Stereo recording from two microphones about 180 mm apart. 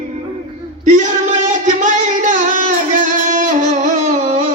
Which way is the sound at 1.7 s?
45° right (ahead or behind).